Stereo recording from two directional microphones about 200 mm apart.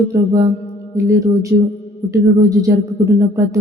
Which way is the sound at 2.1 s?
15° right (ahead or behind).